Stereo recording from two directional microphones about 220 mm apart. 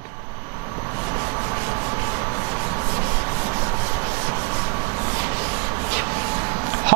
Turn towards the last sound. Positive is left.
turn(degrees=-15)  # may be behind; listen again after turning